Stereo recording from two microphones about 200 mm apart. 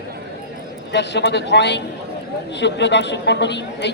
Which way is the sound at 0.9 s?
60° left (ahead or behind).